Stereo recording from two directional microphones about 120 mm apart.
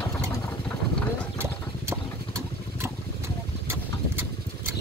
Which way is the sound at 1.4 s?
20° right (ahead or behind).